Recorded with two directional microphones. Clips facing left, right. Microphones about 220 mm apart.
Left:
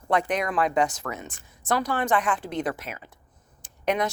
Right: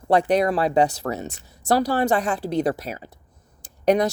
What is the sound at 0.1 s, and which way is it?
Speech, 35° right (ahead or behind).